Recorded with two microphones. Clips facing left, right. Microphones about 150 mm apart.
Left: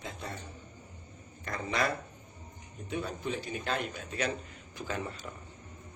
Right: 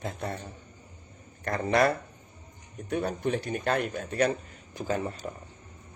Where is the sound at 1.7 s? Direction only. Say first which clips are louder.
Right 8 dB; 60° right (ahead or behind).